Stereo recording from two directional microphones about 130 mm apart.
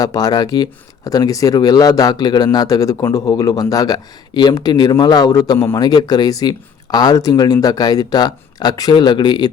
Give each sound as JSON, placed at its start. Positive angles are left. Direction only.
{"t": 0.0, "sound": "speech", "side_deg": 30}